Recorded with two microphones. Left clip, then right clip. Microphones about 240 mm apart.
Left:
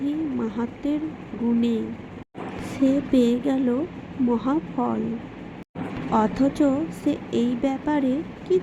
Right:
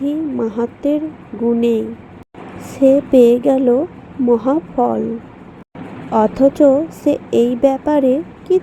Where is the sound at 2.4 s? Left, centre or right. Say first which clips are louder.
Right 10 dB; centre.